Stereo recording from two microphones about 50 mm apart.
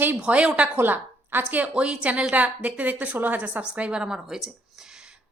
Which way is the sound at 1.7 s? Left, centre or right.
Right.